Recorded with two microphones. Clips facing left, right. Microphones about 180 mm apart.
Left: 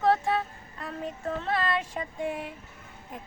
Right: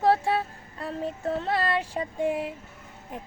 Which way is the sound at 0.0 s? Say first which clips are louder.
Right 2 dB; 30° right (ahead or behind).